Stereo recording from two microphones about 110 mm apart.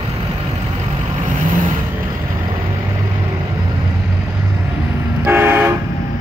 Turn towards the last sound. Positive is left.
turn(degrees=-20)  # may be behind; listen again after turning